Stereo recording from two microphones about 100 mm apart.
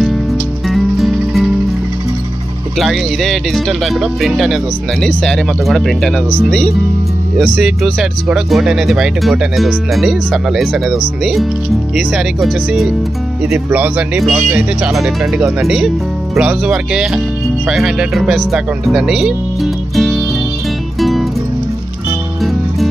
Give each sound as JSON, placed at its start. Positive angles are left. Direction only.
{"t": 0.0, "sound": "music", "side_deg": 0}
{"t": 2.8, "sound": "speech", "side_deg": 0}
{"t": 13.7, "sound": "speech", "side_deg": -15}
{"t": 21.0, "sound": "music", "side_deg": 0}
{"t": 22.4, "sound": "music", "side_deg": 0}